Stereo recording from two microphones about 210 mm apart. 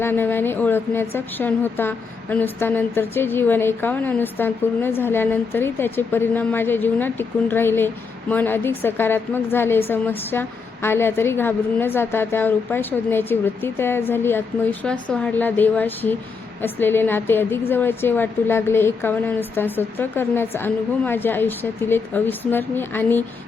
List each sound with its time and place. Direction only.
0.0 s speech: 10° left (ahead or behind)